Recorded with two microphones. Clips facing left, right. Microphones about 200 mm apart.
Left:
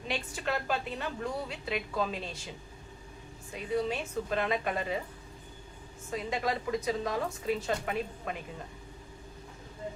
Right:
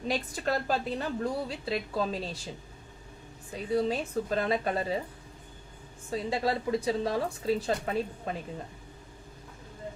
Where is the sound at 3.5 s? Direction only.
35° right (ahead or behind).